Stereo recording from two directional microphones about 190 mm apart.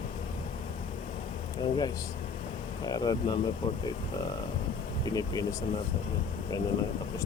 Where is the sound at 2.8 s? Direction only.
20° left (ahead or behind).